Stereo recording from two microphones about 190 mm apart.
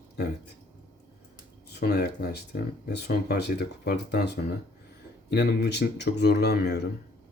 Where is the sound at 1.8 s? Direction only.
55° left (ahead or behind).